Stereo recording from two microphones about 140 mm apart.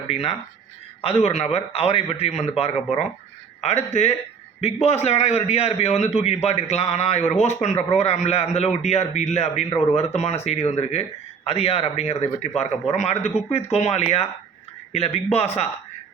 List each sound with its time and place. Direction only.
0.1 s a man's voice: 45° left (ahead or behind)